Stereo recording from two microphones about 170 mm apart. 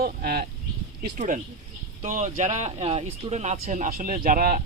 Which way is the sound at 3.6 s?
50° right (ahead or behind).